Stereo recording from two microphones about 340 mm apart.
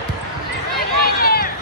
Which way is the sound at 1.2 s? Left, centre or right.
Left.